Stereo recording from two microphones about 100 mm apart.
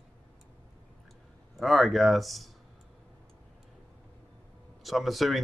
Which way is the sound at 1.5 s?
Centre (ahead or behind).